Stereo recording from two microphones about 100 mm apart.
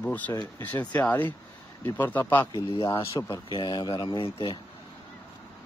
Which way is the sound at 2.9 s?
35° left (ahead or behind).